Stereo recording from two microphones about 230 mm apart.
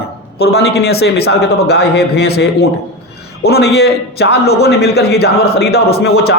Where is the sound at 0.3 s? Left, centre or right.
Left.